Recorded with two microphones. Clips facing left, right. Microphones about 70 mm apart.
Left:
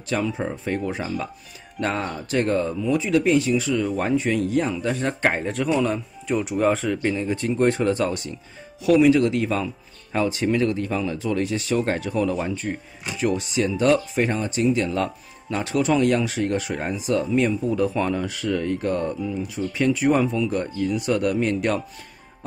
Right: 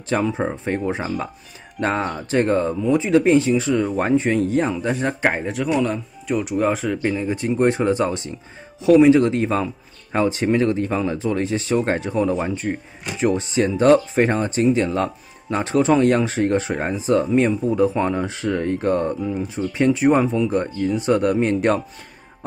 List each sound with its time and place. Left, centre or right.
0.1 s speech: right
5.2 s speech: centre; by 21.8 s right